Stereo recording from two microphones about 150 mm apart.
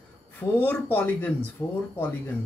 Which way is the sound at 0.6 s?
10° left (ahead or behind).